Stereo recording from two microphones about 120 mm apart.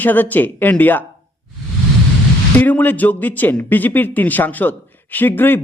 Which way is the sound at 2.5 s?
15° left (ahead or behind).